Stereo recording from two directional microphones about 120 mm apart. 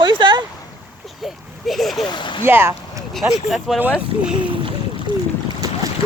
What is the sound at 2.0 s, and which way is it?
Speech, 40° left (ahead or behind).